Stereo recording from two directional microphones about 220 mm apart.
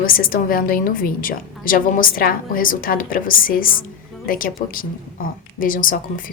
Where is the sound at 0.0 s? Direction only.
40° left (ahead or behind).